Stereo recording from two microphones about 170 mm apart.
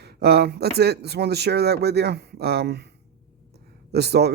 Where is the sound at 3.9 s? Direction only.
75° right (ahead or behind).